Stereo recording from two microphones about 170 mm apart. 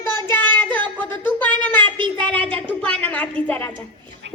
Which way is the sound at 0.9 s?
10° left (ahead or behind).